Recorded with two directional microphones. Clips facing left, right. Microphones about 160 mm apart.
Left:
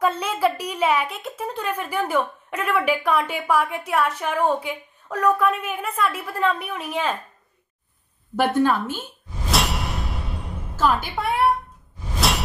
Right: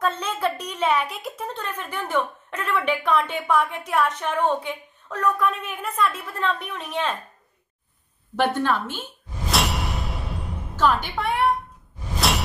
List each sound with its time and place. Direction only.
0.0 s a sound: 10° left (ahead or behind)
1.4 s a woman's voice: 10° left (ahead or behind)
8.4 s a woman's voice: 10° left (ahead or behind)
9.5 s music: centre (ahead or behind)
10.8 s a woman's voice: 5° left (ahead or behind)